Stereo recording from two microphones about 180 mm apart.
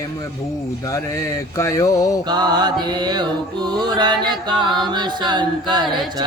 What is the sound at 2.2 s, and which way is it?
Mantra, 25° right (ahead or behind).